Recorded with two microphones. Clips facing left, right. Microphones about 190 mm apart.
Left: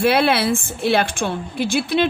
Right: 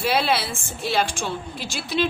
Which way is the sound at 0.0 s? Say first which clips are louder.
Left 6 dB; 60° left (ahead or behind).